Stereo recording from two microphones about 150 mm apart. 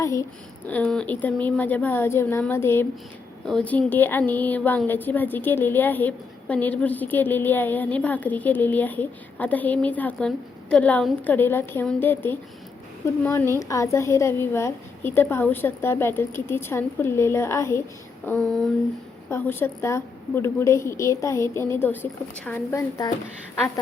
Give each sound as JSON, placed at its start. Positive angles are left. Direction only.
{"t": 0.0, "sound": "speech", "side_deg": 20}
{"t": 0.7, "sound": "a woman's voice", "side_deg": 10}
{"t": 18.3, "sound": "speech", "side_deg": 0}
{"t": 19.3, "sound": "a woman's voice", "side_deg": 15}